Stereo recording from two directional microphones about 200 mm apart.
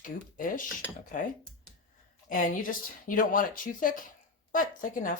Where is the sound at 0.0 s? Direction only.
40° left (ahead or behind).